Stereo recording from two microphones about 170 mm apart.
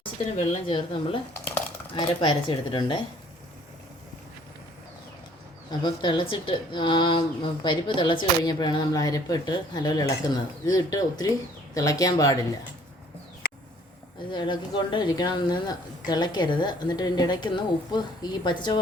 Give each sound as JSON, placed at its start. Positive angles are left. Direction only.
{"t": 0.0, "sound": "a woman's voice", "side_deg": 30}
{"t": 1.3, "sound": "a sound", "side_deg": 10}
{"t": 2.0, "sound": "a woman's voice", "side_deg": 30}
{"t": 5.7, "sound": "a woman's voice", "side_deg": 25}
{"t": 14.3, "sound": "a woman's voice", "side_deg": 25}